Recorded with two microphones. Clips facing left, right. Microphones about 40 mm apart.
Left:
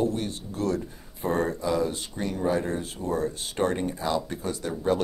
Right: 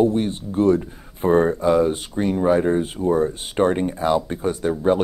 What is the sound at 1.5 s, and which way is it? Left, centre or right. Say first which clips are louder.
Speech: right 9 dB; right.